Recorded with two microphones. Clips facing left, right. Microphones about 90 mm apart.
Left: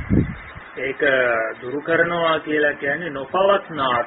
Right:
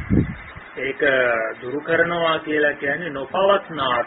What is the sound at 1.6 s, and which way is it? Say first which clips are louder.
Speech: even; 40° left (ahead or behind).